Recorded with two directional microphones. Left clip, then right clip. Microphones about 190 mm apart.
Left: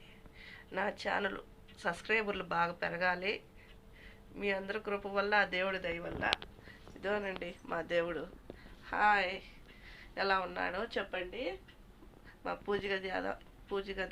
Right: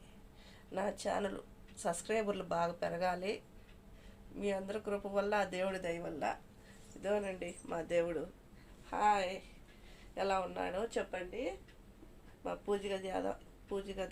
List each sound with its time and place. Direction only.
0.4 s speech: 15° right (ahead or behind)
7.0 s speech: 5° right (ahead or behind)
12.5 s speech: 10° right (ahead or behind)